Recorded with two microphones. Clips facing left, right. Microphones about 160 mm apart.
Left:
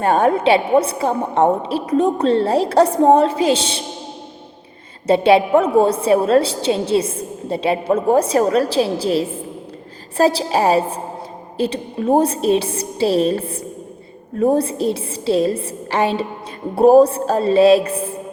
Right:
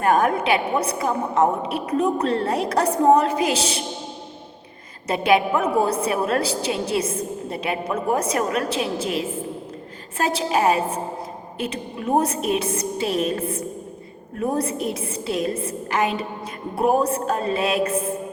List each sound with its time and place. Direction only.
0.0 s a woman's voice: 30° left (ahead or behind)
5.0 s a woman's voice: 30° left (ahead or behind)